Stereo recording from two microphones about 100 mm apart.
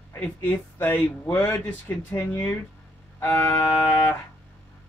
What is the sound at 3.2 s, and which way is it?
Music, 25° left (ahead or behind).